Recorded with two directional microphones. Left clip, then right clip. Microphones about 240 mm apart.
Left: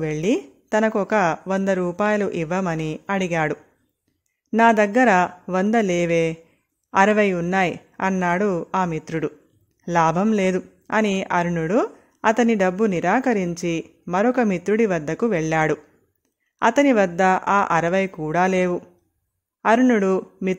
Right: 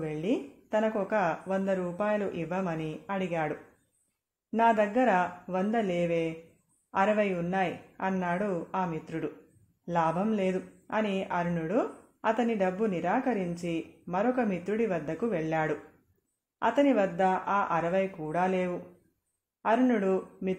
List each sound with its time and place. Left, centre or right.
0.0 s a woman's voice: left